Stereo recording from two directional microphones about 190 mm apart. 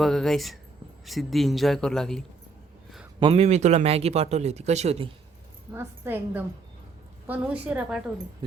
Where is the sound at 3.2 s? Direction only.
30° right (ahead or behind).